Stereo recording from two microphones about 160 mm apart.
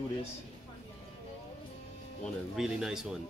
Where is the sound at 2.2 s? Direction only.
5° right (ahead or behind).